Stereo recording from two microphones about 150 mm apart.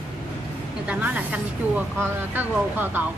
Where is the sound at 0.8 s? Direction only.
10° right (ahead or behind).